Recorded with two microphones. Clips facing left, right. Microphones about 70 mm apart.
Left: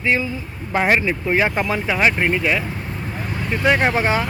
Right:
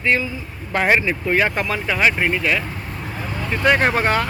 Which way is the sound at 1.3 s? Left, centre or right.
Centre.